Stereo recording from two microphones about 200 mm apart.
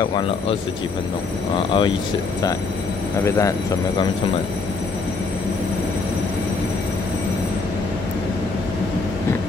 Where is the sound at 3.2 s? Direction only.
15° left (ahead or behind).